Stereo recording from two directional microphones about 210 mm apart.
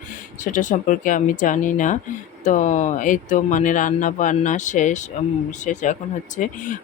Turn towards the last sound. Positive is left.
turn(degrees=40)  # may be behind; listen again after turning